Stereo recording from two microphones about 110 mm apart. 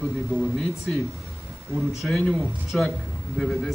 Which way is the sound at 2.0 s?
10° left (ahead or behind).